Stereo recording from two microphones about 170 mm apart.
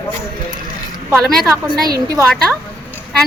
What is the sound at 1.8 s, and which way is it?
Speech, 20° right (ahead or behind).